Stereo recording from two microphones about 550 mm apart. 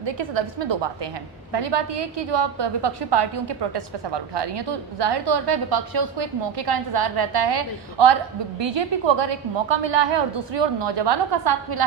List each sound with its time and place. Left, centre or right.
0.0 s a woman's voice: right